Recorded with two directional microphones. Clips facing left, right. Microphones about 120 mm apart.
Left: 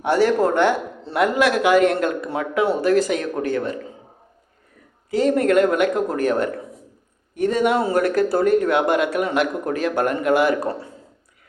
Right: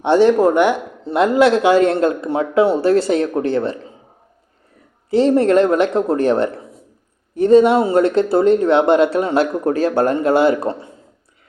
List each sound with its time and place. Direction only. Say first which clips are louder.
0.0 s speech: right 5 dB; 25° right (ahead or behind)
5.1 s speech: right 4 dB; 30° right (ahead or behind)